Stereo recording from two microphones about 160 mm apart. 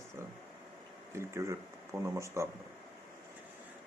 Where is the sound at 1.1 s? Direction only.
15° right (ahead or behind).